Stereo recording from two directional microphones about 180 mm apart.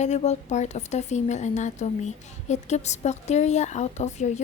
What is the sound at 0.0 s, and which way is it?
A woman's voice, 40° left (ahead or behind).